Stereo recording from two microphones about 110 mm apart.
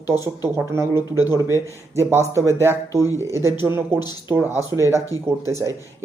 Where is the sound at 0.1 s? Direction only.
20° right (ahead or behind).